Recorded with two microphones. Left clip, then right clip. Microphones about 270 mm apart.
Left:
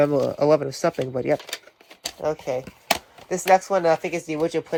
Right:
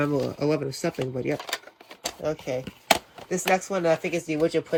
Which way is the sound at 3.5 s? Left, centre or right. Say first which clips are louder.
Left 6 dB; left.